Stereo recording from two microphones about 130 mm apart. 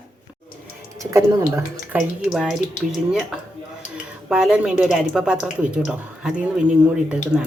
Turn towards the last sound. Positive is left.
turn(degrees=-5)  # may be behind; listen again after turning